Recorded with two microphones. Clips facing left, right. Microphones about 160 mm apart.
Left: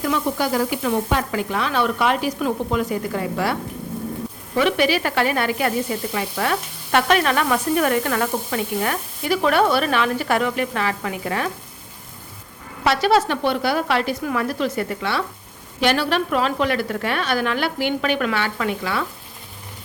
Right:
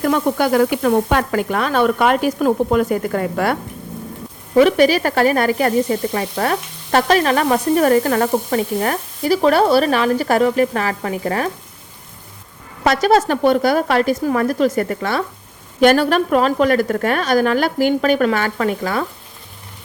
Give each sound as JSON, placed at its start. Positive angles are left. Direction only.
{"t": 0.0, "sound": "sizzle", "side_deg": -55}
{"t": 4.5, "sound": "sizzle", "side_deg": -40}
{"t": 12.8, "sound": "sizzle", "side_deg": -45}